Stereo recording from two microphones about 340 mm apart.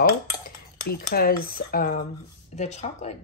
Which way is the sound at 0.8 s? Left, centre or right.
Left.